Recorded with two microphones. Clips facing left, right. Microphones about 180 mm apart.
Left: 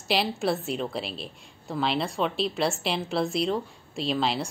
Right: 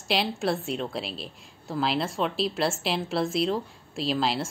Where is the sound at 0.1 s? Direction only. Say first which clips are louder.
Left 1 dB; centre (ahead or behind).